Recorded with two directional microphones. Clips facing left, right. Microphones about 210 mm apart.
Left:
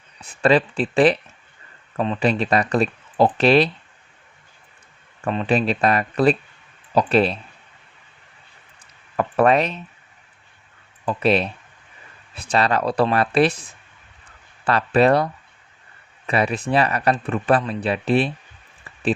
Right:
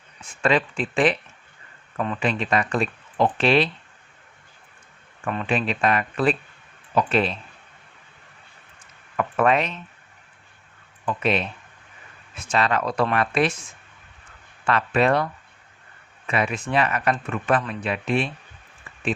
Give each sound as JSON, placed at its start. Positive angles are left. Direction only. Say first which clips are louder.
{"t": 0.2, "sound": "speech", "louder": "left 4 dB", "side_deg": 35}
{"t": 5.5, "sound": "speech", "louder": "left 3 dB", "side_deg": 35}
{"t": 9.1, "sound": "speech", "louder": "left 4 dB", "side_deg": 35}
{"t": 11.0, "sound": "speech", "louder": "left 4 dB", "side_deg": 35}